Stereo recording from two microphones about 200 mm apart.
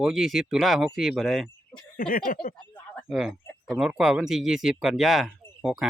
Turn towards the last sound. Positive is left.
turn(degrees=0)  # may be behind; listen again after turning